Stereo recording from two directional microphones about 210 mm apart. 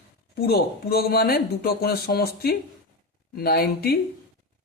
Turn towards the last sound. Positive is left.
turn(degrees=50)  # may be behind; listen again after turning